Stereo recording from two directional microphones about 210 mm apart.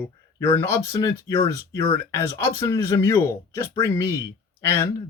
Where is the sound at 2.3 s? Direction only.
15° left (ahead or behind).